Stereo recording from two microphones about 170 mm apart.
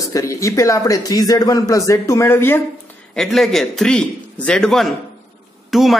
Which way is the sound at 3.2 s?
Centre (ahead or behind).